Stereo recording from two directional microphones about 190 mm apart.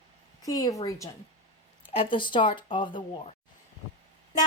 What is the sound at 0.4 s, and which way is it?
Speech, 20° left (ahead or behind).